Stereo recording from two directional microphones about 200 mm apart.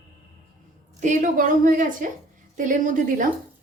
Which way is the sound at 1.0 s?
40° right (ahead or behind).